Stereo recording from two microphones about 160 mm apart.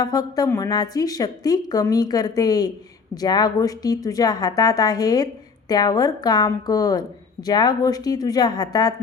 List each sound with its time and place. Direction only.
0.0 s a woman's voice: 25° left (ahead or behind)